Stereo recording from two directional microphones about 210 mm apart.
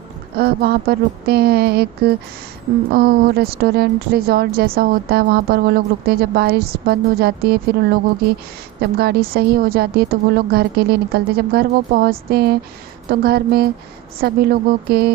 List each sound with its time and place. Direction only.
0.3 s a woman's voice: 50° right (ahead or behind)
8.8 s a woman's voice: 50° right (ahead or behind)